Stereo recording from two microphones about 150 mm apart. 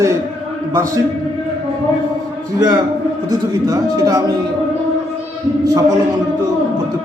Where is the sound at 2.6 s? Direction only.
25° right (ahead or behind).